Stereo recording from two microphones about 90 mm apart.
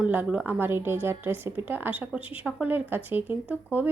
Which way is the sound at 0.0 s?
15° right (ahead or behind).